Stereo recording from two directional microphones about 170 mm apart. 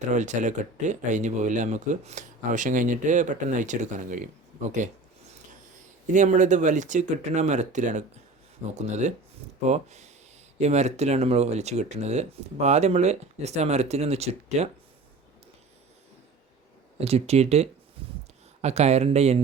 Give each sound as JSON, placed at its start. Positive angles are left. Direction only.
{"t": 0.1, "sound": "speech", "side_deg": -45}
{"t": 6.1, "sound": "speech", "side_deg": -45}
{"t": 17.0, "sound": "speech", "side_deg": -35}
{"t": 18.0, "sound": "a sound", "side_deg": -30}
{"t": 18.6, "sound": "speech", "side_deg": -40}